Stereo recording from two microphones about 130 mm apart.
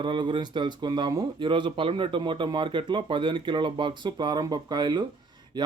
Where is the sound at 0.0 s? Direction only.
40° right (ahead or behind).